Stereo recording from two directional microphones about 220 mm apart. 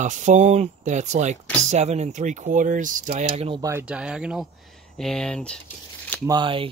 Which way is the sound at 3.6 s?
10° right (ahead or behind).